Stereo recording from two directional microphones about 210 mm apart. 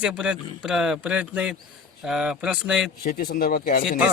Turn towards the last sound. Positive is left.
turn(degrees=45)  # may be behind; listen again after turning